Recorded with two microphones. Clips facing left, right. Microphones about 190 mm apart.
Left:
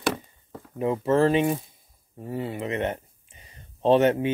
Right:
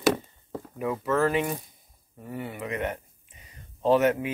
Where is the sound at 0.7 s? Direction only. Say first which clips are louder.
Left 4 dB; 25° left (ahead or behind).